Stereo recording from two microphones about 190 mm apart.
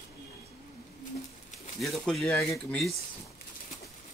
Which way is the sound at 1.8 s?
Centre (ahead or behind).